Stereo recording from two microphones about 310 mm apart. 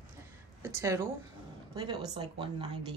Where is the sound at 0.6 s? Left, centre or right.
Centre.